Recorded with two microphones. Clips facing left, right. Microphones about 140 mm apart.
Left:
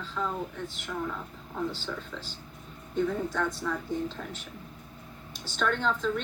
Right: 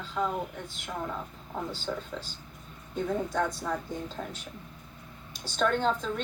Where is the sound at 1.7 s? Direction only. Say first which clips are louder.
Right 2 dB; 45° right (ahead or behind).